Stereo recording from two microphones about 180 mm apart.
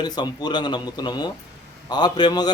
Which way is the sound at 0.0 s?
25° left (ahead or behind).